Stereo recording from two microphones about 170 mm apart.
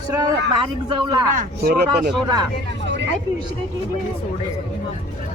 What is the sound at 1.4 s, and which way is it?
Speech, 70° right (ahead or behind).